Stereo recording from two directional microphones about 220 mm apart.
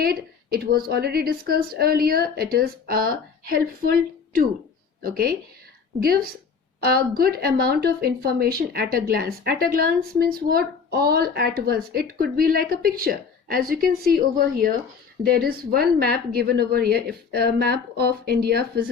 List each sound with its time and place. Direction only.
0.0 s speech: 45° right (ahead or behind)
5.0 s speech: 40° right (ahead or behind)